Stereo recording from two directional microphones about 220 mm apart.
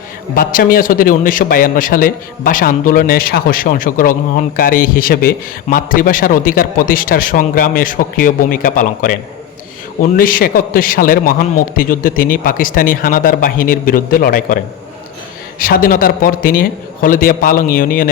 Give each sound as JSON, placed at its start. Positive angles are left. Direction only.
{"t": 0.3, "sound": "a man's voice", "side_deg": 40}